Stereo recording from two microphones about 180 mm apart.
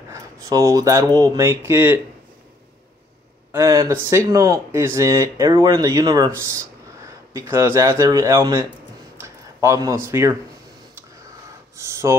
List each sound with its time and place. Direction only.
0.1 s speech: 20° right (ahead or behind)
3.5 s speech: 15° right (ahead or behind)
11.7 s a sound: 15° right (ahead or behind)